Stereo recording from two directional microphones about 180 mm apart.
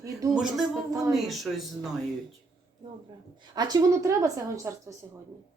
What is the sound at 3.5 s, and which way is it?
A woman's voice, 20° right (ahead or behind).